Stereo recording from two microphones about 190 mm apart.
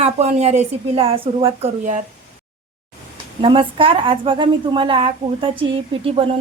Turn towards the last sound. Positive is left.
turn(degrees=-30)  # may be behind; listen again after turning